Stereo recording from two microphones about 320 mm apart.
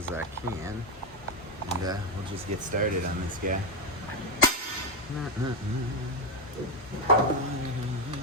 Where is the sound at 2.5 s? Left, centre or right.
Right.